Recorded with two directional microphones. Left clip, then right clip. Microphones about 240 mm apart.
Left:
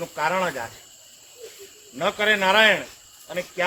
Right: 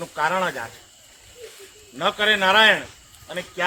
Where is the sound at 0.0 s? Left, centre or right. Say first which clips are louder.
Right 1 dB; centre.